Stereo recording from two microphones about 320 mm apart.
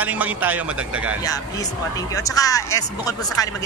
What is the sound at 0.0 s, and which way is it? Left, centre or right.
A man's voice, centre.